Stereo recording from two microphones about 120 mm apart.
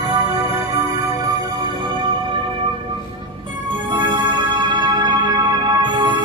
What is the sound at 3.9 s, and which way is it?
Music, 40° right (ahead or behind).